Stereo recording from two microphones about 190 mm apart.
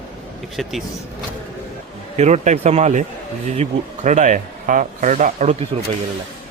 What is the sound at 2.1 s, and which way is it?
Speech, 35° right (ahead or behind).